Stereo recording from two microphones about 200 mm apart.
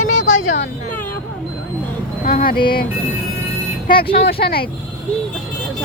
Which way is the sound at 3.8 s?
50° left (ahead or behind).